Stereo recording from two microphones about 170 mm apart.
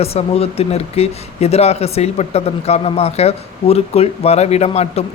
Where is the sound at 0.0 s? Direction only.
35° left (ahead or behind).